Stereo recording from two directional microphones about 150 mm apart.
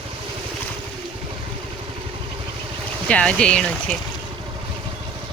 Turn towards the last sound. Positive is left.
turn(degrees=5)  # may be behind; listen again after turning